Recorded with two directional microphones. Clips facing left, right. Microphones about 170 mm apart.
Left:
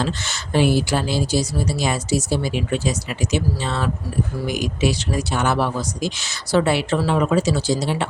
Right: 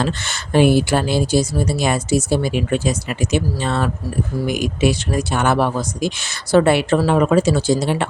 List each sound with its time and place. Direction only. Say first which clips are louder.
0.0 s speech: right 2 dB; 55° right (ahead or behind)